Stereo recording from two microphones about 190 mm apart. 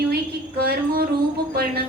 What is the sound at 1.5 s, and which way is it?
Speech, 55° right (ahead or behind).